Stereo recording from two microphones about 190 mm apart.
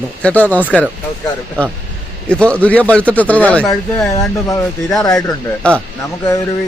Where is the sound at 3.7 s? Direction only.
20° left (ahead or behind).